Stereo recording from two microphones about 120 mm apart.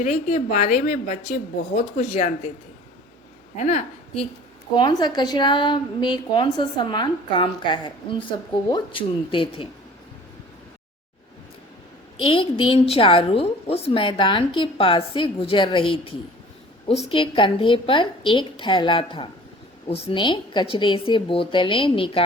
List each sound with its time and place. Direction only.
0.0 s a woman's voice: 70° left (ahead or behind)
3.6 s a woman's voice: 80° left
4.7 s a woman's voice: 40° left (ahead or behind)
12.2 s a woman's voice: 45° left (ahead or behind)